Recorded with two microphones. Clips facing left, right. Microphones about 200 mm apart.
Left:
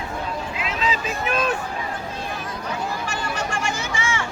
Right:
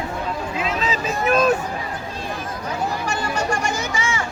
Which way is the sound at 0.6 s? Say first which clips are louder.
Right 1 dB; 40° right (ahead or behind).